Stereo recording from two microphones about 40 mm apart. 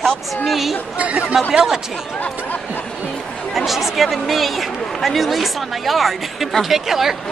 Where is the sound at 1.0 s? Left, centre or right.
Right.